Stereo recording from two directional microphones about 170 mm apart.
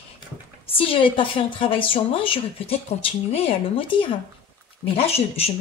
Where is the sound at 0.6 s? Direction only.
35° left (ahead or behind).